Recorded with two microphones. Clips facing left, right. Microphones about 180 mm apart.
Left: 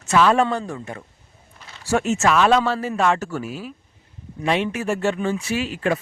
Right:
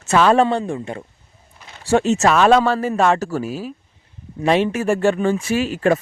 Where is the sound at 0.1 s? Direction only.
40° right (ahead or behind).